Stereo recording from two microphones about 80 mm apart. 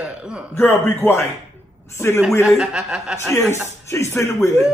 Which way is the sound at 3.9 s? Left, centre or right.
Left.